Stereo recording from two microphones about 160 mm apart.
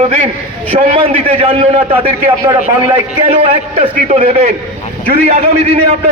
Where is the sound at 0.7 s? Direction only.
40° right (ahead or behind).